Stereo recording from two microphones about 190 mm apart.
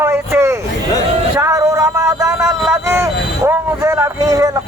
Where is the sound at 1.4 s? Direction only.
15° right (ahead or behind).